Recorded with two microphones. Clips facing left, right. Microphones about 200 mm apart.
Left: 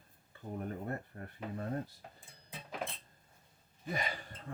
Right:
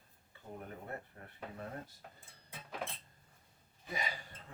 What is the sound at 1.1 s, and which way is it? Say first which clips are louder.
Speech: left 7 dB; 40° left (ahead or behind).